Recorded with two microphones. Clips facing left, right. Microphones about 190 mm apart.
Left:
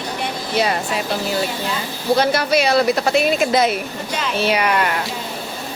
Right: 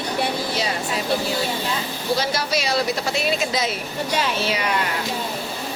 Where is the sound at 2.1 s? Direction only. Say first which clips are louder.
Left 7 dB; 60° left (ahead or behind).